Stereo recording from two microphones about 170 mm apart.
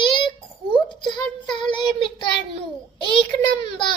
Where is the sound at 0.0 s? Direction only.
30° left (ahead or behind).